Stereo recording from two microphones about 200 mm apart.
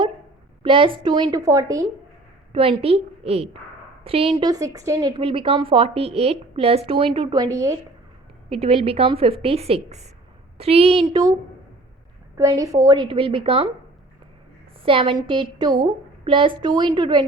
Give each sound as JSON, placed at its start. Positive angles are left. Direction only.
{"t": 0.6, "sound": "a woman's voice", "side_deg": -25}
{"t": 2.5, "sound": "a woman's voice", "side_deg": -30}
{"t": 8.4, "sound": "a woman's voice", "side_deg": -30}
{"t": 12.4, "sound": "a woman's voice", "side_deg": -15}
{"t": 14.8, "sound": "a woman's voice", "side_deg": -25}